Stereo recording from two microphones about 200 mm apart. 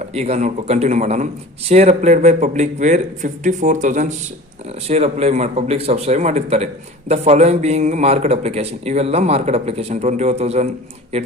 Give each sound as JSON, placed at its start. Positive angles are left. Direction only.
{"t": 0.0, "sound": "speech", "side_deg": -30}